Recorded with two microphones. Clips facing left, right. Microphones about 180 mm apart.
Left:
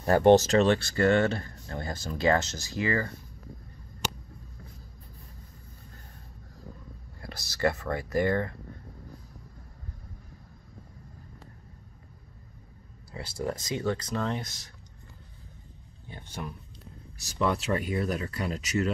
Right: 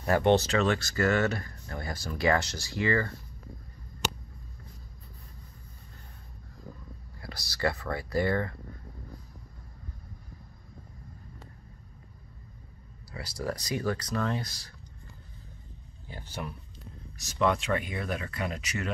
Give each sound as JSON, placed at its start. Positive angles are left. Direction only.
{"t": 0.0, "sound": "speech", "side_deg": 35}
{"t": 7.2, "sound": "speech", "side_deg": 20}
{"t": 13.1, "sound": "speech", "side_deg": 25}
{"t": 17.2, "sound": "speech", "side_deg": 35}